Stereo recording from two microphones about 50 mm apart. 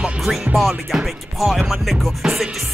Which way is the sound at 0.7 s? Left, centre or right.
Centre.